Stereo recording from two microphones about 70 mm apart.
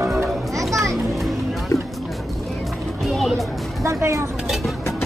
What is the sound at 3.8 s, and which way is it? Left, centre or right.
Speech, right.